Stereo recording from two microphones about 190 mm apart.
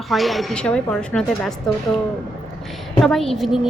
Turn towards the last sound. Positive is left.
turn(degrees=0)  # may be behind; listen again after turning